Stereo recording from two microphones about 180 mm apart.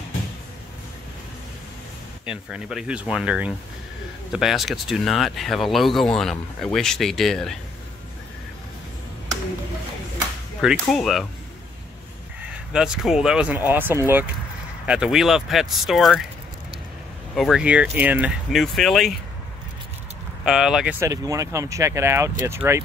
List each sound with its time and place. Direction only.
2.2 s speech: 5° right (ahead or behind)
10.6 s speech: centre (ahead or behind)
12.4 s speech: 5° right (ahead or behind)
17.4 s speech: 5° right (ahead or behind)
20.4 s speech: centre (ahead or behind)
21.0 s speech: 20° right (ahead or behind)